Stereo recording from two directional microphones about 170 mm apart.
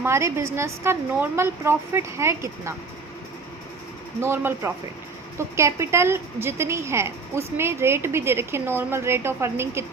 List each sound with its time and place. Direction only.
0.0 s a woman's voice: 15° right (ahead or behind)
4.2 s a woman's voice: 15° right (ahead or behind)